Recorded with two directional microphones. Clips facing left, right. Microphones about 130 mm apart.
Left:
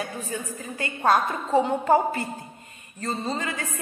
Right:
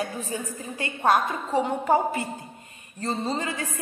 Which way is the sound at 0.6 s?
25° right (ahead or behind).